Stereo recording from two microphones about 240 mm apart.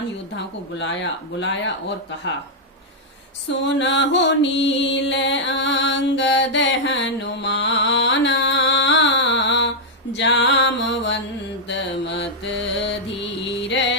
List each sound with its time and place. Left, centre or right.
0.3 s speech: left
3.6 s mantra: left
12.8 s music: left